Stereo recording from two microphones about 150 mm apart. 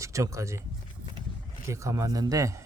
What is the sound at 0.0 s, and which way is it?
Speech, 20° right (ahead or behind).